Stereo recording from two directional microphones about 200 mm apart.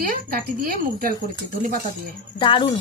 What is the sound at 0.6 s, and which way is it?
Speech, 45° right (ahead or behind).